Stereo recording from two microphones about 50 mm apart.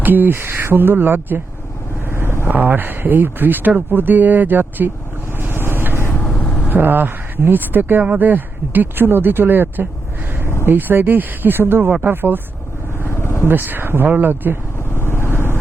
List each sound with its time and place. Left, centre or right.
0.0 s speech: right
2.0 s vehicle: right
2.5 s speech: right
5.4 s vehicle: right
6.2 s vehicle: left
6.7 s speech: right
13.1 s vehicle: left
13.5 s speech: right
14.8 s vehicle: left